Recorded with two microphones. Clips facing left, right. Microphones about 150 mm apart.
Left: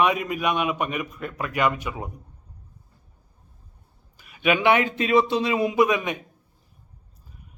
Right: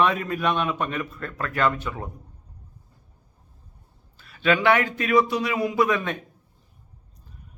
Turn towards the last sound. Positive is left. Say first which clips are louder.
# left 2 dB
turn(degrees=15)  # may be behind; listen again after turning